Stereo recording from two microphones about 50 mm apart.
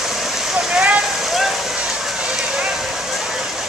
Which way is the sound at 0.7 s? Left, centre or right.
Right.